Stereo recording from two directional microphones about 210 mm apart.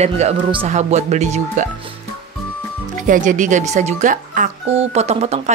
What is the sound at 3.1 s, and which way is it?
Speech, 35° right (ahead or behind).